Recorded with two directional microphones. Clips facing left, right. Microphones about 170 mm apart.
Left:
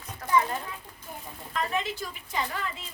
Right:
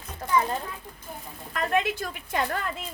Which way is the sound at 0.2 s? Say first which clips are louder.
Even; 25° right (ahead or behind).